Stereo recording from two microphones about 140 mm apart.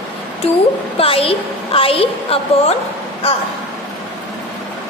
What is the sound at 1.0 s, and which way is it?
A woman's voice, 40° left (ahead or behind).